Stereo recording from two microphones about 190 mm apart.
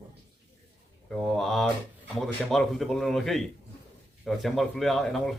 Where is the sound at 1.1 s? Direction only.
Centre (ahead or behind).